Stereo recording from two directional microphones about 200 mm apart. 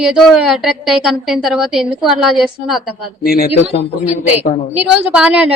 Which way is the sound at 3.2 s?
45° left (ahead or behind).